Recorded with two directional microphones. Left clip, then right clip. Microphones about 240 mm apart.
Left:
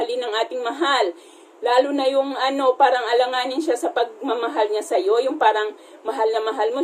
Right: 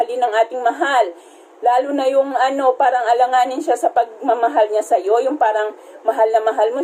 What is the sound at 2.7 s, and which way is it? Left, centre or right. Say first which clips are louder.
A woman's voice: right 2 dB; left.